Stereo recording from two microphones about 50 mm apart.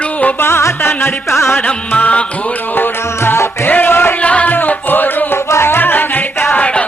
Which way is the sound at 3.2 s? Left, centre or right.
Left.